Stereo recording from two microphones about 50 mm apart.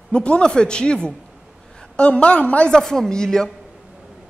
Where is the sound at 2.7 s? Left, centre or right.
Centre.